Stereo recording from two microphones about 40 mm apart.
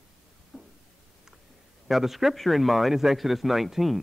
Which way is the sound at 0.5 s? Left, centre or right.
Centre.